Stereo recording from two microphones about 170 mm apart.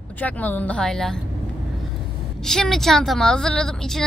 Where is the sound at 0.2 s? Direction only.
10° left (ahead or behind).